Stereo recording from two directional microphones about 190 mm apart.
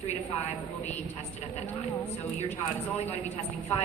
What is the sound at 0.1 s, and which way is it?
Speech, 35° left (ahead or behind).